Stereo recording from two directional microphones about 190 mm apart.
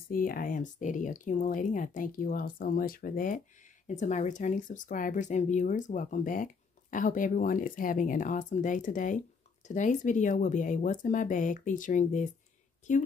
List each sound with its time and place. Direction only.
0.1 s speech: 50° left (ahead or behind)